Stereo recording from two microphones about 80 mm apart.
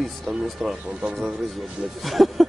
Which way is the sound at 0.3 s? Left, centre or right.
Centre.